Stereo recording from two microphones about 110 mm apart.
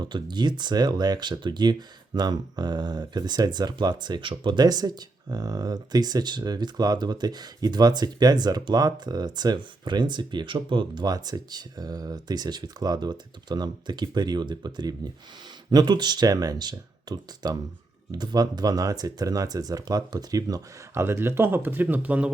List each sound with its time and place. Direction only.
0.0 s speech: 40° right (ahead or behind)
21.0 s speech: 20° right (ahead or behind)